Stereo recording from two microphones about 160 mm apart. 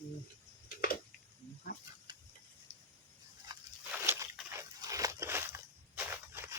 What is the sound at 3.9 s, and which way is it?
Slosh, 15° right (ahead or behind).